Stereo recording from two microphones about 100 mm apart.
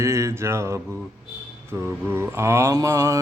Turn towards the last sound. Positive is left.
turn(degrees=-30)  # may be behind; listen again after turning